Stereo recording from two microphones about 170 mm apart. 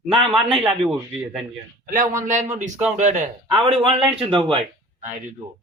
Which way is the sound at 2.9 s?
45° right (ahead or behind).